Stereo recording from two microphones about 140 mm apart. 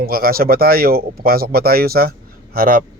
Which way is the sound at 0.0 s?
90° right.